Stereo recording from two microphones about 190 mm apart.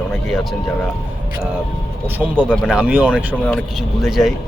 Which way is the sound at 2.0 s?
10° right (ahead or behind).